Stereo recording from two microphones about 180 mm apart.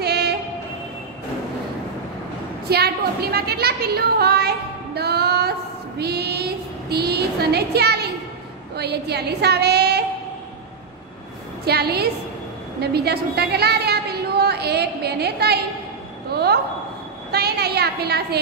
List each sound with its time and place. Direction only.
0.0 s train: 65° right (ahead or behind)
2.7 s a woman's voice: 60° right (ahead or behind)
11.6 s a woman's voice: 60° right (ahead or behind)